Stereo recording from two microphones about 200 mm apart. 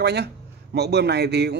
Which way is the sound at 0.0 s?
55° right (ahead or behind).